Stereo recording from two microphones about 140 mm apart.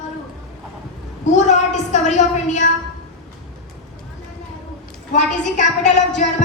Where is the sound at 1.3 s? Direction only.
60° left (ahead or behind).